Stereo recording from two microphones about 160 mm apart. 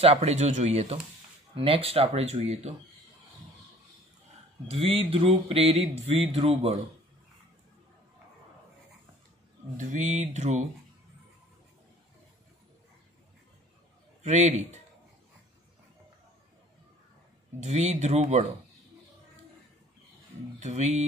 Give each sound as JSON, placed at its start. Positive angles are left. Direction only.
{"t": 0.0, "sound": "speech", "side_deg": -40}
{"t": 1.5, "sound": "a sound", "side_deg": -35}
{"t": 4.6, "sound": "a sound", "side_deg": -35}
{"t": 9.8, "sound": "speech", "side_deg": -50}
{"t": 14.2, "sound": "speech", "side_deg": -45}
{"t": 17.6, "sound": "speech", "side_deg": -45}
{"t": 20.5, "sound": "speech", "side_deg": -45}